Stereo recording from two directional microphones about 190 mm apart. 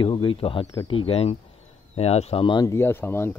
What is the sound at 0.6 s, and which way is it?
Speech, 15° left (ahead or behind).